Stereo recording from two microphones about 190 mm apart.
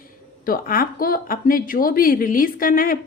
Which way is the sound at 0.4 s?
50° left (ahead or behind).